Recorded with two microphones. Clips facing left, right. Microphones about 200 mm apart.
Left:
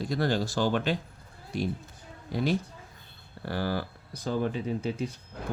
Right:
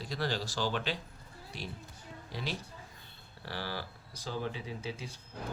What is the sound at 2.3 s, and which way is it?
Speech, 50° left (ahead or behind).